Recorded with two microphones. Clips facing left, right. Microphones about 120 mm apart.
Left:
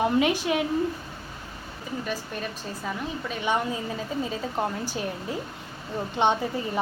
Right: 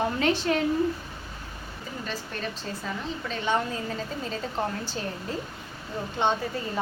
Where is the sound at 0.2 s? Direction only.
10° left (ahead or behind).